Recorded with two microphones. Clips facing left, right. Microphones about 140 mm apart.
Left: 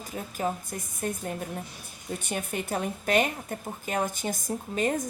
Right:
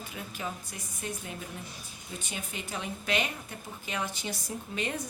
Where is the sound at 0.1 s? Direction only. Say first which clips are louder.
Left 9 dB; 45° left (ahead or behind).